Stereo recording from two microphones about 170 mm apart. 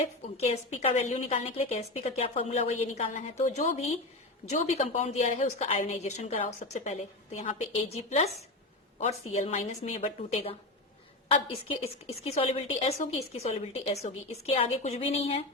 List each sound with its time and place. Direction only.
0.0 s a woman's voice: 40° left (ahead or behind)